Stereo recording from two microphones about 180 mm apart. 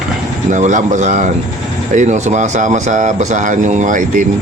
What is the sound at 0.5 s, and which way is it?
Speech, 45° right (ahead or behind).